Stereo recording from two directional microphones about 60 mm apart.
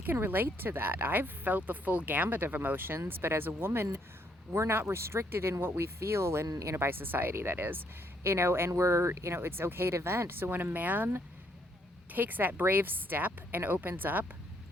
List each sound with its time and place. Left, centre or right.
0.0 s speech: right
6.5 s speech: right
6.7 s speech: right